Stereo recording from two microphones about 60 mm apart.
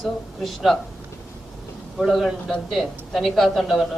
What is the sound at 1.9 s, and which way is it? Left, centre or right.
A man's voice, centre.